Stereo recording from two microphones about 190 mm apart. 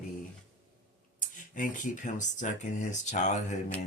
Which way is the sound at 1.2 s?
40° left (ahead or behind).